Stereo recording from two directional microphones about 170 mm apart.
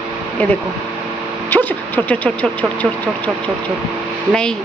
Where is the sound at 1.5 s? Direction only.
10° left (ahead or behind).